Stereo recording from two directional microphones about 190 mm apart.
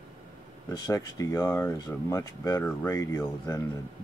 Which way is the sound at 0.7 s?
20° left (ahead or behind).